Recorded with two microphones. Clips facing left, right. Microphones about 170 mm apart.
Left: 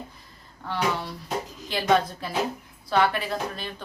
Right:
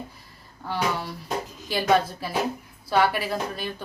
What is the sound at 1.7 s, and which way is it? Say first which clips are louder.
A woman's voice: right 1 dB; 5° right (ahead or behind).